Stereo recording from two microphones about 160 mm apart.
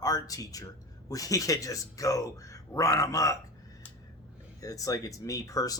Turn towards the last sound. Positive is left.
turn(degrees=20)  # may be behind; listen again after turning